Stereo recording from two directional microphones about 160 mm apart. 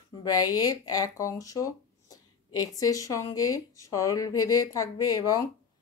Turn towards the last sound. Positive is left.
turn(degrees=20)  # may be behind; listen again after turning